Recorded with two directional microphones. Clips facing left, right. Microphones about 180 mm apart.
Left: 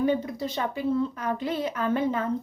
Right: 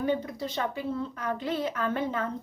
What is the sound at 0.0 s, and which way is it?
A woman's voice, 10° left (ahead or behind).